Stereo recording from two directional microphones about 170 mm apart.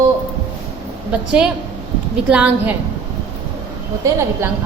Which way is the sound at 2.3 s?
5° right (ahead or behind).